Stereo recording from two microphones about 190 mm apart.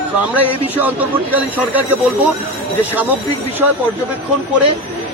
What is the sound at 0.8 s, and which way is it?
Speech, 10° right (ahead or behind).